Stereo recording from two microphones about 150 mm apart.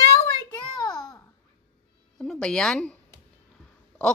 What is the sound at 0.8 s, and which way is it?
Babbling, 25° left (ahead or behind).